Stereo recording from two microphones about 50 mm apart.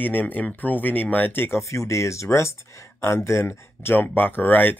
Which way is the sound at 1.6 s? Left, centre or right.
Left.